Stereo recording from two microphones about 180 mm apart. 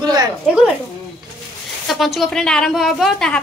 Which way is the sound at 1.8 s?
Centre (ahead or behind).